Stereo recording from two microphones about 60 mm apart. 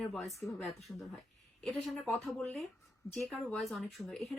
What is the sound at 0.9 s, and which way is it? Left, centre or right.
Speech, left.